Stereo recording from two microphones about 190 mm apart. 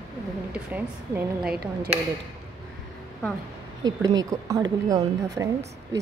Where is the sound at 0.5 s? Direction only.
5° right (ahead or behind).